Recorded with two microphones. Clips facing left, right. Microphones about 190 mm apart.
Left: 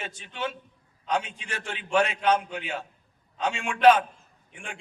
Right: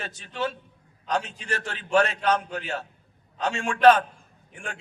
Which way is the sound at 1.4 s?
10° left (ahead or behind).